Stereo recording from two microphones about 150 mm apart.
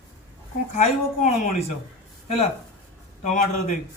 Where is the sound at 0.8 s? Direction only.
55° left (ahead or behind).